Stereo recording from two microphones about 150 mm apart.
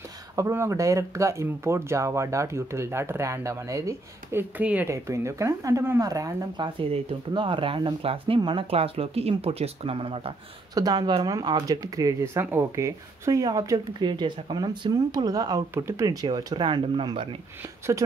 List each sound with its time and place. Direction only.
0.4 s speech: 15° right (ahead or behind); by 10.3 s 35° right (ahead or behind)
10.7 s speech: 25° right (ahead or behind)